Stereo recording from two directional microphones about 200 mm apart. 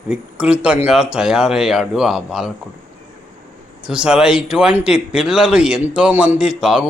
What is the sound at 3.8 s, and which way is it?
Speech, 5° right (ahead or behind).